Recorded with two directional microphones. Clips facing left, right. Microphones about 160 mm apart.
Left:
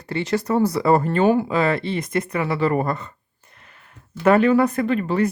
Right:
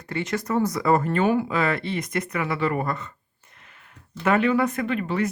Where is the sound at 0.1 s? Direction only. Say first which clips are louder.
Left 4 dB; 30° left (ahead or behind).